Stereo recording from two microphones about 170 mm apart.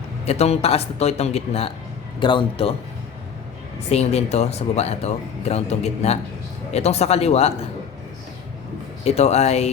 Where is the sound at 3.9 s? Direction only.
40° left (ahead or behind).